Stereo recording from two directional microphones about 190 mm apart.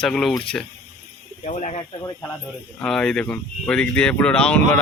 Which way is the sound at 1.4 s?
35° left (ahead or behind).